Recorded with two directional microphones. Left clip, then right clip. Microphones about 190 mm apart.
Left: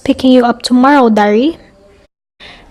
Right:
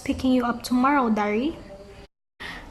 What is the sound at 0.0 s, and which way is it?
A woman's voice, 45° left (ahead or behind).